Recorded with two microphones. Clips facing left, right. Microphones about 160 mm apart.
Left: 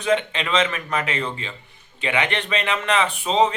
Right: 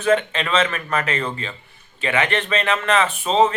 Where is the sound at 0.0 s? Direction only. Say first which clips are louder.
Right 3 dB; 15° left (ahead or behind).